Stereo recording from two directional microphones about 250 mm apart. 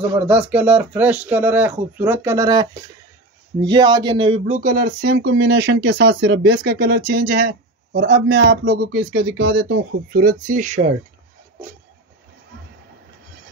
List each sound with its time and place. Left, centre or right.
0.3 s speech: centre; by 10.9 s right